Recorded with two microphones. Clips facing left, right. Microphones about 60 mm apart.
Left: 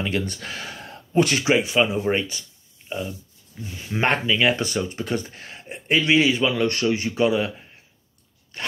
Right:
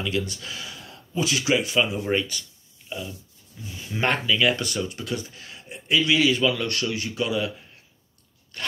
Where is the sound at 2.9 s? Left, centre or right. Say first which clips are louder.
Left 4 dB; left.